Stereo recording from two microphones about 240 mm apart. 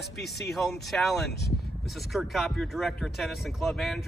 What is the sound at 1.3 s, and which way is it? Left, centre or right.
Speech, left.